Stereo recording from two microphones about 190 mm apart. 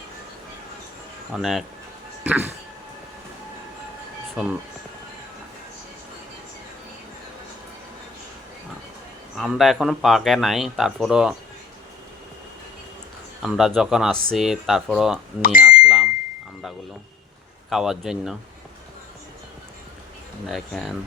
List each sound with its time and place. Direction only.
1.3 s speech: centre (ahead or behind)
2.2 s a sound: 10° right (ahead or behind)
4.4 s speech: 5° right (ahead or behind)
9.4 s speech: centre (ahead or behind)
13.4 s speech: centre (ahead or behind)
15.4 s speech: 45° left (ahead or behind)
15.6 s bicycle bell: 5° right (ahead or behind)
17.7 s speech: centre (ahead or behind)
20.5 s speech: centre (ahead or behind)